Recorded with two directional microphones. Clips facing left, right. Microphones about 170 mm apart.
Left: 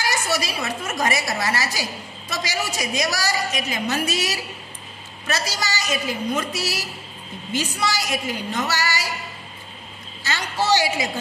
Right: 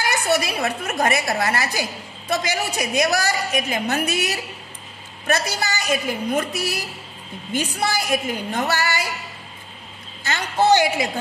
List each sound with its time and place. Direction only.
0.0 s a woman's voice: 55° right (ahead or behind)
10.2 s a woman's voice: 55° right (ahead or behind)